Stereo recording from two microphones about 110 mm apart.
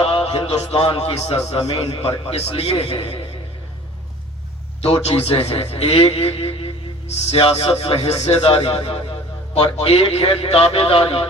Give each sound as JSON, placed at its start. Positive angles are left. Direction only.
{"t": 0.0, "sound": "a man's voice", "side_deg": 60}
{"t": 4.8, "sound": "a man's voice", "side_deg": 60}